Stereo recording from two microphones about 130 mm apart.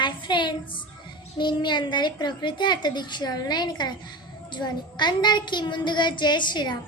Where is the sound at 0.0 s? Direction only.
35° left (ahead or behind).